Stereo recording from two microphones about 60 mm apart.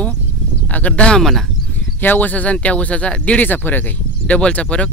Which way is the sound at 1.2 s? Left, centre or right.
Centre.